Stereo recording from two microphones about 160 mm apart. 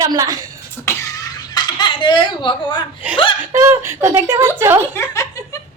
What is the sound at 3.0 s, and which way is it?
Speech, 10° right (ahead or behind).